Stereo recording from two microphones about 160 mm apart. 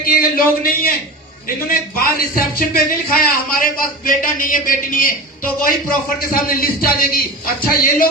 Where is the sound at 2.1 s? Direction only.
65° left (ahead or behind).